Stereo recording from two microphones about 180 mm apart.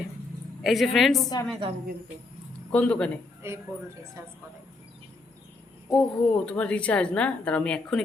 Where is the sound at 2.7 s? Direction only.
5° left (ahead or behind).